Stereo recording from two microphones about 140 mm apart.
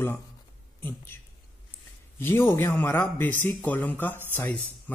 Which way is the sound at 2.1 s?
15° left (ahead or behind).